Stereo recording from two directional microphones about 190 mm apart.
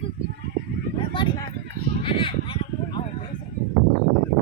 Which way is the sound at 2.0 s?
25° left (ahead or behind).